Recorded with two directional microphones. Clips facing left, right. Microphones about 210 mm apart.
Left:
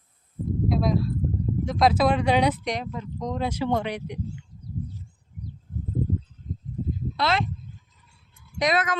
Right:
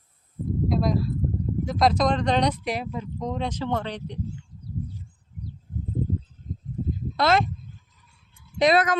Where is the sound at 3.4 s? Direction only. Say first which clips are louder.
Left 4 dB; 10° left (ahead or behind).